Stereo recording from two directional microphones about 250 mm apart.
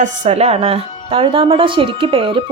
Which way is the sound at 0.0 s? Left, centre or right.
Right.